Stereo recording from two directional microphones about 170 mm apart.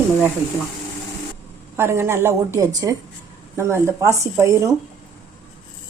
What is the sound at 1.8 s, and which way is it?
Speech, 15° right (ahead or behind).